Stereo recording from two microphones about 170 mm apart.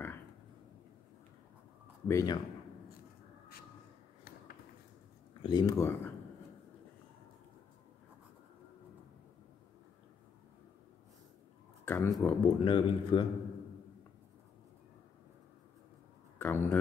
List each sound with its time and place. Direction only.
2.0 s speech: 20° left (ahead or behind)
5.4 s speech: 25° left (ahead or behind)
11.8 s speech: 15° left (ahead or behind)
12.5 s speech: 30° left (ahead or behind)
16.3 s speech: 15° left (ahead or behind)